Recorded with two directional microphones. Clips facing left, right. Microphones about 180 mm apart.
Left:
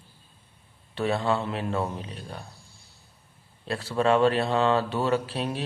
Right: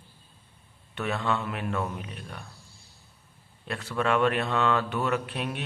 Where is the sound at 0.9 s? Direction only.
30° left (ahead or behind).